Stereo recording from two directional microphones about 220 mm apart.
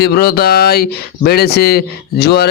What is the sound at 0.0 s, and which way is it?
Speech, 45° left (ahead or behind).